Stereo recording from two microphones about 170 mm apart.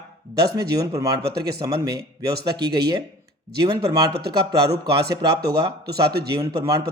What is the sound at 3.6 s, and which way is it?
Speech, 20° right (ahead or behind).